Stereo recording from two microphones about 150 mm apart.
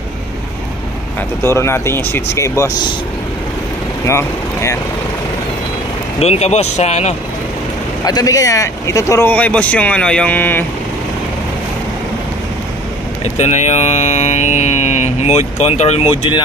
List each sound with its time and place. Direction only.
1.4 s speech: 15° left (ahead or behind)
4.1 s speech: 20° left (ahead or behind)
6.1 s speech: 45° left (ahead or behind)
8.0 s speech: 25° left (ahead or behind)
9.3 s speech: 10° left (ahead or behind)
13.2 s speech: 50° left (ahead or behind)